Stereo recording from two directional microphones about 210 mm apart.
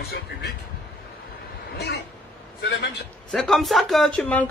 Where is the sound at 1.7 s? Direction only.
50° left (ahead or behind).